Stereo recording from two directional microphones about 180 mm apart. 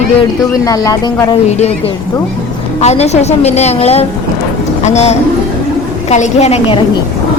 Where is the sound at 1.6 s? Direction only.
35° left (ahead or behind).